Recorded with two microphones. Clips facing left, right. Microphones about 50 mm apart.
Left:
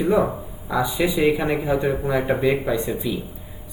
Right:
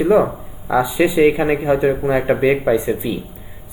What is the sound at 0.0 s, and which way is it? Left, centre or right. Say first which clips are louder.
Speech: right 5 dB; right.